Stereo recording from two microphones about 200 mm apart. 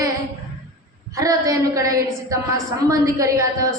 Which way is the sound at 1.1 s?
15° right (ahead or behind).